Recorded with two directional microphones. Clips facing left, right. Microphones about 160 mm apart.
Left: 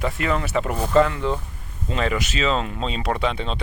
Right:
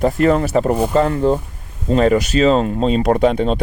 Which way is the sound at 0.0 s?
40° right (ahead or behind).